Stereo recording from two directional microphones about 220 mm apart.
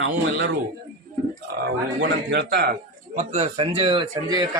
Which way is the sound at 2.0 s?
50° right (ahead or behind).